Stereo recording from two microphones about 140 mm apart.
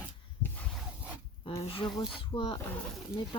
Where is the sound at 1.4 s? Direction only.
40° left (ahead or behind).